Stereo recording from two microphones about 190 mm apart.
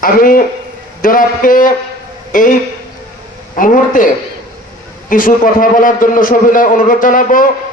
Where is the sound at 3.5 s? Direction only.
45° left (ahead or behind).